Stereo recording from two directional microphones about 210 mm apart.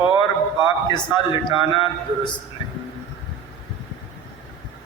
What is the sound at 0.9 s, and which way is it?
A man's voice, 20° left (ahead or behind).